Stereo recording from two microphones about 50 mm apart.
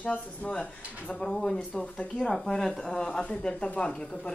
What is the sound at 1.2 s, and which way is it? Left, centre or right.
A woman's voice, centre.